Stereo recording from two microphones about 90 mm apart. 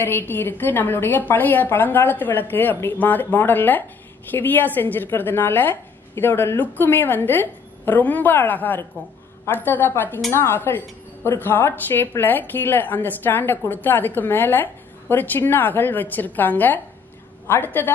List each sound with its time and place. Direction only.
0.0 s a woman's voice: 25° left (ahead or behind)